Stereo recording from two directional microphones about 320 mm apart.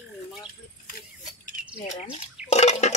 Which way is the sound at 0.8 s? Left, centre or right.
Left.